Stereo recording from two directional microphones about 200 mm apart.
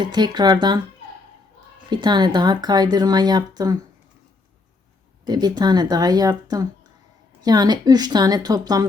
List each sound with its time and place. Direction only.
0.0 s speech: 20° right (ahead or behind)
1.9 s speech: 20° right (ahead or behind)
5.2 s speech: 20° right (ahead or behind)